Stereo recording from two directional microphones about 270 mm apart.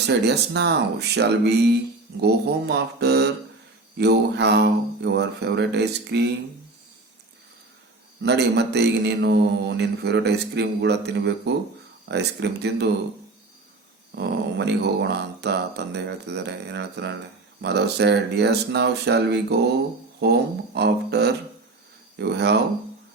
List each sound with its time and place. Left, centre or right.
0.1 s speech: right
8.2 s speech: right
14.2 s speech: right
20.7 s speech: right